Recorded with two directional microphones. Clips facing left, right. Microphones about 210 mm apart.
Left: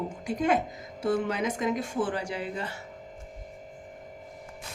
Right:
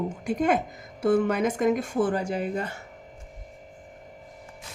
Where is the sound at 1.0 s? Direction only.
50° right (ahead or behind).